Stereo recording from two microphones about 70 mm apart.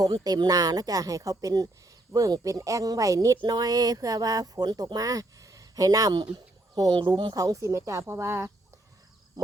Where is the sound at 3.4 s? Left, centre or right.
Right.